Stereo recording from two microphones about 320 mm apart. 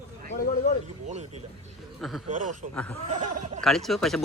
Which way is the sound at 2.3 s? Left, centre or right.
Right.